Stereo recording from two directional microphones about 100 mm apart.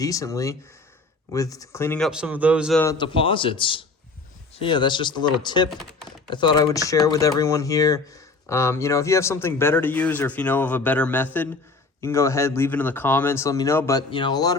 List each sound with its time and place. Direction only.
0.0 s speech: 35° left (ahead or behind)
2.0 s a man's voice: 10° right (ahead or behind)
3.0 s speech: 60° left (ahead or behind)
6.7 s speech: 35° left (ahead or behind); by 11.4 s 20° left (ahead or behind)
11.9 s speech: 30° left (ahead or behind)
14.1 s speech: 50° left (ahead or behind)